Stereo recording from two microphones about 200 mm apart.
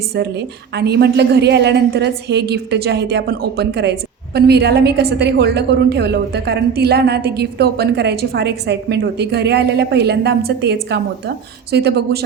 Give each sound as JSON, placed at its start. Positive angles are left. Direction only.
{"t": 0.2, "sound": "a woman's voice", "side_deg": -55}